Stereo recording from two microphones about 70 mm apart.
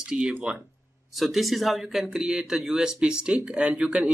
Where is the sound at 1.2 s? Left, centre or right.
Centre.